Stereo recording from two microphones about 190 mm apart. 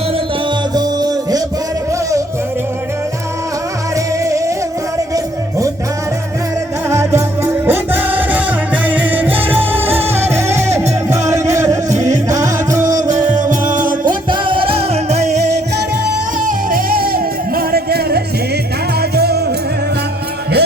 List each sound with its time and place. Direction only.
0.7 s music: 20° right (ahead or behind)
3.9 s music: 15° right (ahead or behind)
6.8 s music: 15° right (ahead or behind)
11.1 s music: 15° right (ahead or behind)
13.2 s music: 40° right (ahead or behind)
14.0 s music: 25° right (ahead or behind)
16.5 s music: 45° right (ahead or behind)